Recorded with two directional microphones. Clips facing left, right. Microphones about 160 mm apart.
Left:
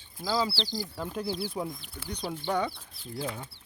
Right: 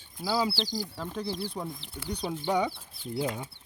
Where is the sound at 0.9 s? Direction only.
5° left (ahead or behind).